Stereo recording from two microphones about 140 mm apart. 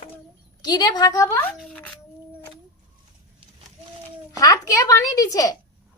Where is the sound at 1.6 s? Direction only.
5° left (ahead or behind).